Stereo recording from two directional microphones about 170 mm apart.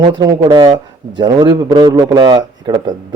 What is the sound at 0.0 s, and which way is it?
A man's voice, 25° right (ahead or behind).